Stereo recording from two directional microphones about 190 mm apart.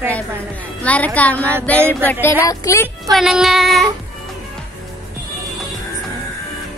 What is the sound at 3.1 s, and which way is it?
Speech, centre (ahead or behind).